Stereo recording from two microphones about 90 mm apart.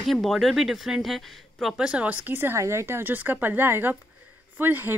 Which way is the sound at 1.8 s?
15° right (ahead or behind).